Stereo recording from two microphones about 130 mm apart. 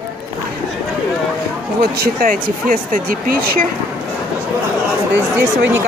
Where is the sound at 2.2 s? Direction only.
90° right.